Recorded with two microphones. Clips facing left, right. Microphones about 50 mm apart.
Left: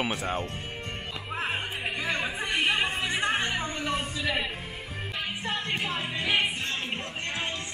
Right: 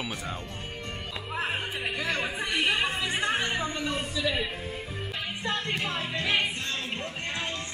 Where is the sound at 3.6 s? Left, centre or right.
Left.